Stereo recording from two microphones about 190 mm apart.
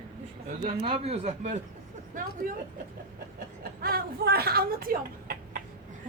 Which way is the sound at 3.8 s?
55° right (ahead or behind).